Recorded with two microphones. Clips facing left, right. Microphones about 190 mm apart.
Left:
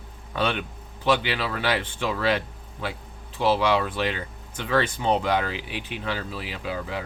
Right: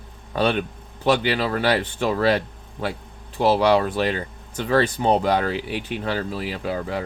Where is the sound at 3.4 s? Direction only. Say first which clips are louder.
Right 4 dB; 40° right (ahead or behind).